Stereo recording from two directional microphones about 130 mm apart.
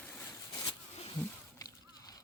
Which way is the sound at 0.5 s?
35° left (ahead or behind).